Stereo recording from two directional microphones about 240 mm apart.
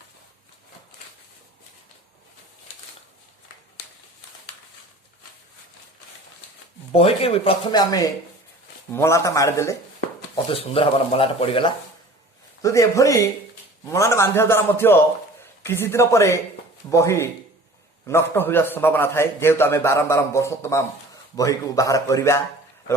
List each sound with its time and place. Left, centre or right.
6.9 s a man's voice: left
10.5 s a man's voice: left